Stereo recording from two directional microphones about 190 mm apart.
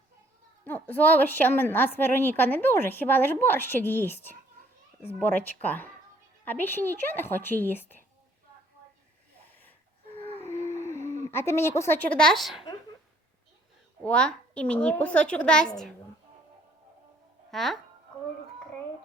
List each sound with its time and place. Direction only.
0.6 s a woman's voice: 10° left (ahead or behind)
10.2 s a sound: 10° left (ahead or behind)
11.0 s a sound: 40° right (ahead or behind)
11.3 s a woman's voice: 15° left (ahead or behind)
14.0 s a woman's voice: 5° left (ahead or behind)
17.5 s speech: centre (ahead or behind)